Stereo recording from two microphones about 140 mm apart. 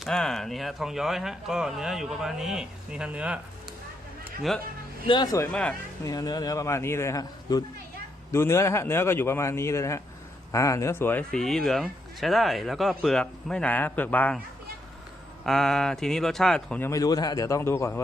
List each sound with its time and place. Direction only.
0.0 s speech: 5° left (ahead or behind)
5.0 s speech: 30° left (ahead or behind)
5.5 s speech: 5° left (ahead or behind)
6.1 s speech: 30° left (ahead or behind); by 14.3 s 10° left (ahead or behind)
15.4 s speech: centre (ahead or behind)
16.8 s speech: 25° left (ahead or behind)